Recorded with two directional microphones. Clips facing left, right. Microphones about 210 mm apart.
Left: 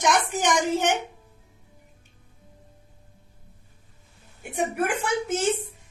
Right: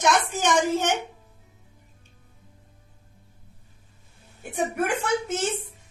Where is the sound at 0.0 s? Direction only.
15° left (ahead or behind).